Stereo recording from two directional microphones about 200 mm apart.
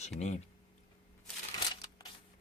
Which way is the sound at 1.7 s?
20° left (ahead or behind).